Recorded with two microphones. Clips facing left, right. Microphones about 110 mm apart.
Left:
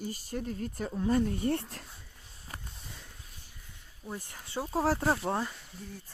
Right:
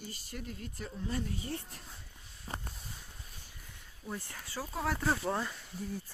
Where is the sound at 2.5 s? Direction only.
30° right (ahead or behind).